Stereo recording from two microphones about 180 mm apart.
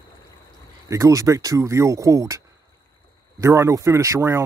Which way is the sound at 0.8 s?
15° right (ahead or behind).